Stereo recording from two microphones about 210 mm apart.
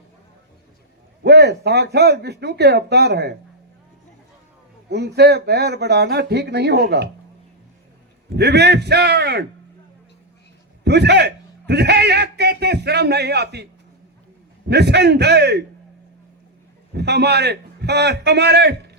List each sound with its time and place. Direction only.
1.2 s speech: 50° right (ahead or behind)
4.9 s speech: 50° right (ahead or behind)
8.4 s speech: 50° right (ahead or behind)
10.8 s a man's voice: 55° right (ahead or behind)
14.7 s speech: 50° right (ahead or behind)
16.9 s a man's voice: 50° right (ahead or behind)